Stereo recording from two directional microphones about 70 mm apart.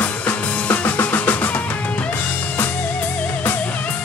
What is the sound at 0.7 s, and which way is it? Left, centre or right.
Music, left.